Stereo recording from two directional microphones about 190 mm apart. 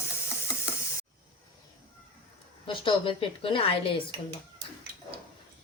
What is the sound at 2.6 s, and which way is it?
A woman's voice, 25° left (ahead or behind).